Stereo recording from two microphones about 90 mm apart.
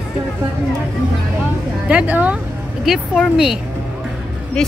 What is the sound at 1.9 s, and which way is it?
Speech, 15° right (ahead or behind).